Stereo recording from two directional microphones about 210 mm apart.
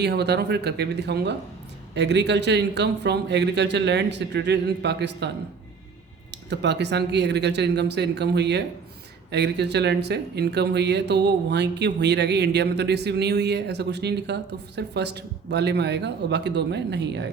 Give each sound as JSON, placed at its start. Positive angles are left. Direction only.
{"t": 0.0, "sound": "a man's voice", "side_deg": -50}
{"t": 6.3, "sound": "speech", "side_deg": -55}